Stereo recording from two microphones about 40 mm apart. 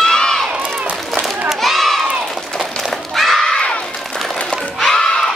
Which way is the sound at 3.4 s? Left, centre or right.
Left.